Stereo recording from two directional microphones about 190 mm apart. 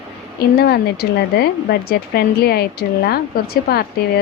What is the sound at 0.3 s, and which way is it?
A woman's voice, 55° left (ahead or behind).